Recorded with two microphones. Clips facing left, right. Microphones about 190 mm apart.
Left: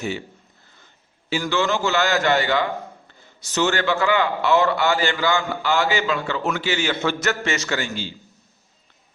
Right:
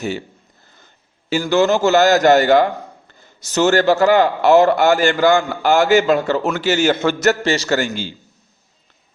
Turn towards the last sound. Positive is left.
turn(degrees=-35)  # may be behind; listen again after turning